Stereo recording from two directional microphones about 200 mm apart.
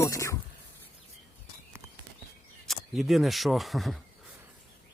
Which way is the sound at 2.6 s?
Centre (ahead or behind).